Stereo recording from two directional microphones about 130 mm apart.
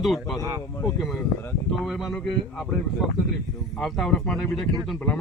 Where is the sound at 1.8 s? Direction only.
Centre (ahead or behind).